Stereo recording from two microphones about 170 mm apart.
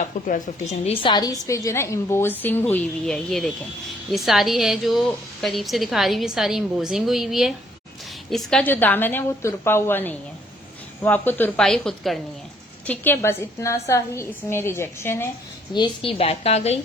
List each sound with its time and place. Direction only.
0.3 s speech: 50° left (ahead or behind)
1.0 s a woman's voice: 25° left (ahead or behind)
15.7 s a woman's voice: 30° left (ahead or behind)